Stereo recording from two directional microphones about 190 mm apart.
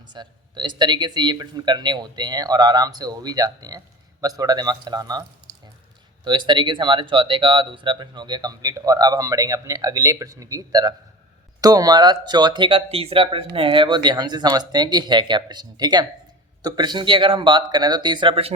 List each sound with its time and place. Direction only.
0.1 s speech: 25° right (ahead or behind)
6.2 s speech: 25° right (ahead or behind)